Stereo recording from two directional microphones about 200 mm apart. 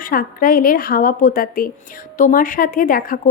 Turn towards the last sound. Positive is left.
turn(degrees=45)  # may be behind; listen again after turning